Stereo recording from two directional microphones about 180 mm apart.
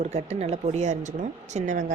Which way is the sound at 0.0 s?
35° right (ahead or behind).